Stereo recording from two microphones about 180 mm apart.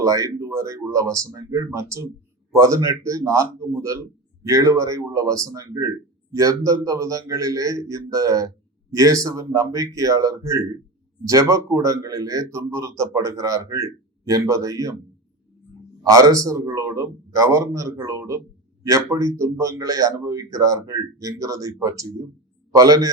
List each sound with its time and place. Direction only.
0.0 s a man's voice: 20° right (ahead or behind)
16.0 s a man's voice: 20° right (ahead or behind)